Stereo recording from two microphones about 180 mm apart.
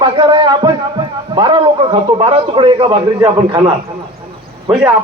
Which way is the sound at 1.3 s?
25° right (ahead or behind).